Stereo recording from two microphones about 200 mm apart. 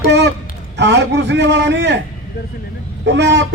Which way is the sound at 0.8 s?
60° right (ahead or behind).